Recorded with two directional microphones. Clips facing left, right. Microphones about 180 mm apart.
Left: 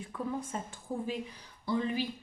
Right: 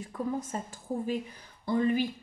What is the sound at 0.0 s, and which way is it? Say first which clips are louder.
A woman's voice: right 3 dB; 40° right (ahead or behind).